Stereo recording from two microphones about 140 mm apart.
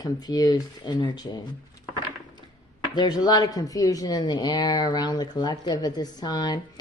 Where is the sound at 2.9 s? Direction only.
30° left (ahead or behind).